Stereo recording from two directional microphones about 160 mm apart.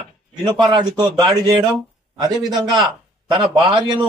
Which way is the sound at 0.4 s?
25° right (ahead or behind).